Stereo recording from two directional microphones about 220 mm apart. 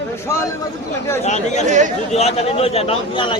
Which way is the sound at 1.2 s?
30° left (ahead or behind).